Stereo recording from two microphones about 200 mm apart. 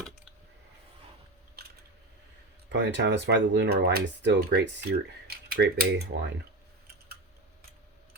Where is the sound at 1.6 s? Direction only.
50° right (ahead or behind).